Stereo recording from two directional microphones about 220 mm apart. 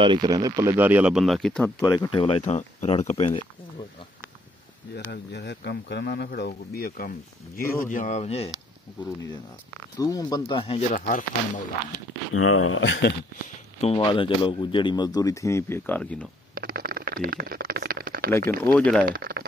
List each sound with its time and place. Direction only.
0.0 s speech: 20° right (ahead or behind); by 1.7 s 5° left (ahead or behind)
1.8 s speech: 15° left (ahead or behind)
4.9 s speech: 50° left (ahead or behind); by 8.5 s 30° left (ahead or behind)
9.9 s speech: 15° left (ahead or behind)
10.9 s speech: 35° left (ahead or behind)
12.4 s speech: 75° left (ahead or behind)
13.7 s speech: 25° left (ahead or behind); by 16.3 s 5° left (ahead or behind)
16.5 s a sound: 40° right (ahead or behind)
18.7 s speech: 5° left (ahead or behind)
19.0 s speech: 45° right (ahead or behind)